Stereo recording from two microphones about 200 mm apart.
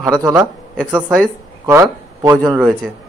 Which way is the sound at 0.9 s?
Centre (ahead or behind).